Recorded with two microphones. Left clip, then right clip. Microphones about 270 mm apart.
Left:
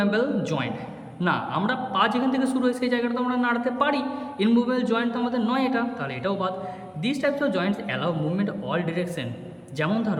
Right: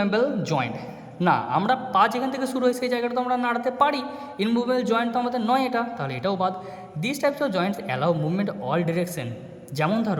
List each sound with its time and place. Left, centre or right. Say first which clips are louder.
0.0 s a man's voice: right 1 dB; centre